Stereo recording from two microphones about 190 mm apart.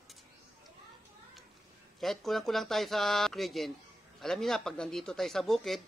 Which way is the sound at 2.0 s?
Centre (ahead or behind).